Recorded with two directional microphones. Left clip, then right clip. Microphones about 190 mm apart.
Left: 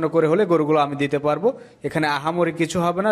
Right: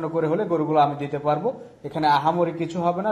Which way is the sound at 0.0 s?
60° left (ahead or behind).